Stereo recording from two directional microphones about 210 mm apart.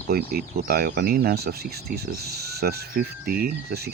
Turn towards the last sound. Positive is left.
turn(degrees=-50)  # may be behind; listen again after turning